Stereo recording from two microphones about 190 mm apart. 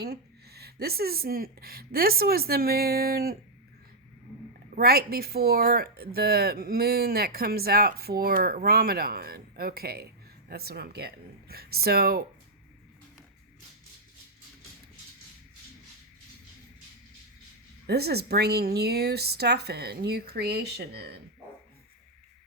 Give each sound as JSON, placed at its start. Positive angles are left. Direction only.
{"t": 0.0, "sound": "speech", "side_deg": -55}
{"t": 4.7, "sound": "speech", "side_deg": -55}
{"t": 17.8, "sound": "speech", "side_deg": -55}